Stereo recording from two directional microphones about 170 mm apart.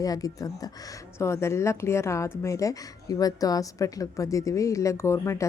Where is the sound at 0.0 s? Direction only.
20° left (ahead or behind).